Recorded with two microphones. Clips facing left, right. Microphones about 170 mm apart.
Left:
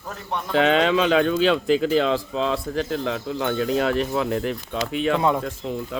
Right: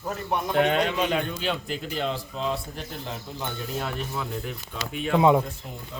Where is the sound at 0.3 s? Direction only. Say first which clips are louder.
Right 1 dB; 10° right (ahead or behind).